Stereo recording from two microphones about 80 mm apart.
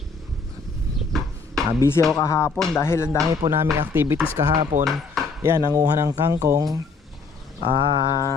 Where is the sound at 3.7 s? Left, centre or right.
Right.